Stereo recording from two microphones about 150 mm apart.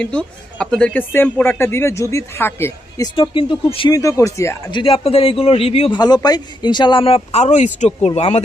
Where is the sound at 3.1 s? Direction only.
35° left (ahead or behind).